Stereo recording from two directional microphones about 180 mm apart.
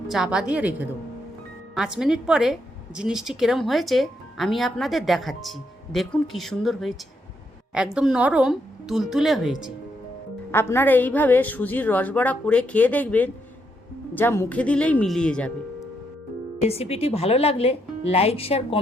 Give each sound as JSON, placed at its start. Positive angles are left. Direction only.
{"t": 0.1, "sound": "a woman's voice", "side_deg": -5}
{"t": 7.9, "sound": "a woman's voice", "side_deg": -5}
{"t": 10.5, "sound": "a woman's voice", "side_deg": 15}
{"t": 16.6, "sound": "speech", "side_deg": 35}